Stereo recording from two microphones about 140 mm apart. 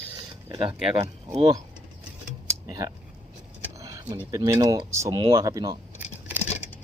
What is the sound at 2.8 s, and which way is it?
Speech, 20° right (ahead or behind).